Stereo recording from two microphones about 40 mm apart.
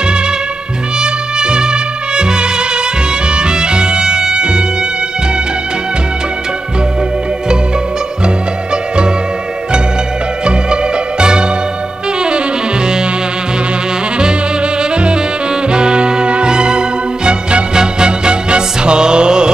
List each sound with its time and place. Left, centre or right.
1.0 s music: right
10.4 s music: right
14.8 s saxophone: right
15.7 s music: right